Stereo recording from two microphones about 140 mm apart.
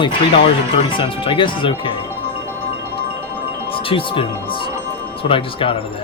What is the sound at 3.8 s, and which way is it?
Speech, 40° left (ahead or behind).